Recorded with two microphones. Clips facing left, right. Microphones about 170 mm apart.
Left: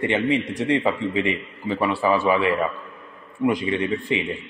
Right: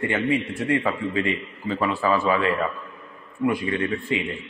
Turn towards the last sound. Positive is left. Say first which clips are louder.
# left 2 dB
turn(degrees=20)  # may be behind; listen again after turning